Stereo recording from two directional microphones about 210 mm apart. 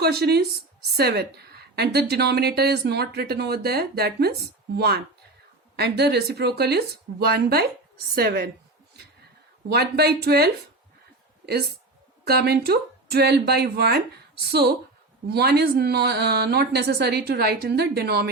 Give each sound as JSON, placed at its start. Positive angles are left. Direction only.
{"t": 0.0, "sound": "a woman's voice", "side_deg": -50}
{"t": 9.6, "sound": "a woman's voice", "side_deg": -50}
{"t": 12.2, "sound": "a woman's voice", "side_deg": -50}
{"t": 15.3, "sound": "a woman's voice", "side_deg": -50}